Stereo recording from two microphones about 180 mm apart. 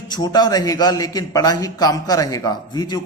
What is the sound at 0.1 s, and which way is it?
A man's voice, 20° left (ahead or behind).